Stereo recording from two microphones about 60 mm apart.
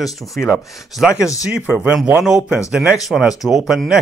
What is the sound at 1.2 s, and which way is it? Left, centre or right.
Speech, left.